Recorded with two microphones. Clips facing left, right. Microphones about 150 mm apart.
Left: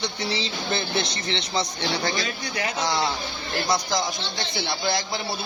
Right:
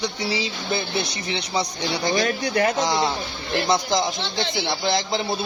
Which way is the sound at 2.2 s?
50° right (ahead or behind).